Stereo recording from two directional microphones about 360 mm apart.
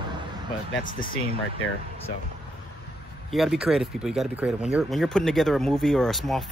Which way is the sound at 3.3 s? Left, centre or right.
Centre.